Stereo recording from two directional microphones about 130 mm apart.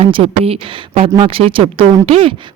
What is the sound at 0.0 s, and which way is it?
A woman's voice, 50° right (ahead or behind).